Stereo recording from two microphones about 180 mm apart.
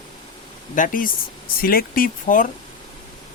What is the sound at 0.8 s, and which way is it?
Speech, 50° left (ahead or behind).